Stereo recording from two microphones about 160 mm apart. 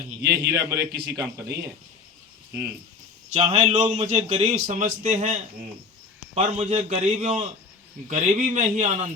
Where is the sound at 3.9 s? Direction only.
45° right (ahead or behind).